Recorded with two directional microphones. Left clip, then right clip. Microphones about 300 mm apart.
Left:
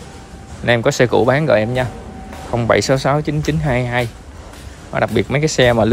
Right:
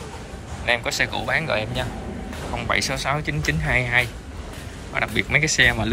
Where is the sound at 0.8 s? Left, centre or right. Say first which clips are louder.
Left 10 dB; left.